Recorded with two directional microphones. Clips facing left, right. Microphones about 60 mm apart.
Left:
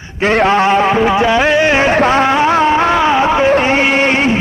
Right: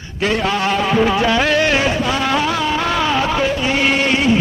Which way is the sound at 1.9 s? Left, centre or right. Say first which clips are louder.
Left 8 dB; left.